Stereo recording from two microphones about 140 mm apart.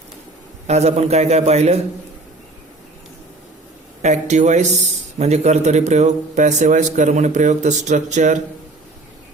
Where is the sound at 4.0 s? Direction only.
55° right (ahead or behind).